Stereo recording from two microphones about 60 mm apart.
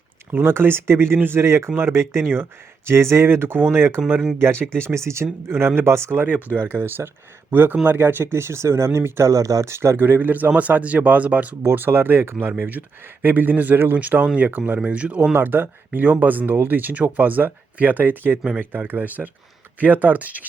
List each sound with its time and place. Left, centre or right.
0.3 s speech: right
6.2 s speech: right
6.6 s speech: right
9.3 s speech: right
9.6 s speech: right
10.0 s speech: right
11.7 s speech: right
14.8 s speech: right
15.3 s speech: right